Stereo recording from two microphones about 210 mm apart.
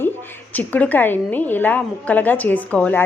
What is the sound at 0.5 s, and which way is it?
A woman's voice, 5° left (ahead or behind).